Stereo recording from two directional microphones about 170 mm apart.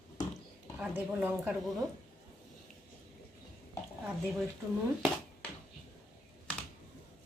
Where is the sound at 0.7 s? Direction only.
10° right (ahead or behind).